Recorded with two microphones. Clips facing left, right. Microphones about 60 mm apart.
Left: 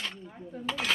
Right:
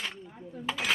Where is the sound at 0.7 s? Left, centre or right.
Centre.